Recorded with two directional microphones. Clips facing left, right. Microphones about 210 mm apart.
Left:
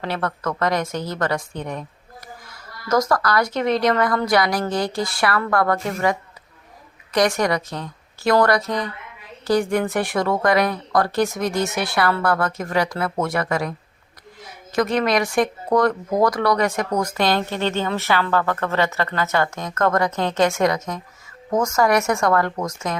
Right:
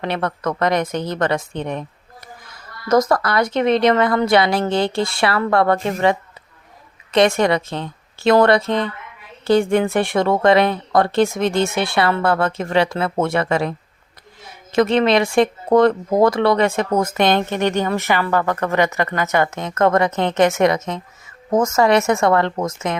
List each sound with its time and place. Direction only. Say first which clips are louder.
0.0 s speech: right 3 dB; 20° right (ahead or behind)
2.9 s a woman's voice: right 3 dB; 20° right (ahead or behind)